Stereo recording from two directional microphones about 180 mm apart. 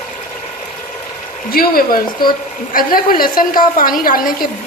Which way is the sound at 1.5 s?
55° left (ahead or behind).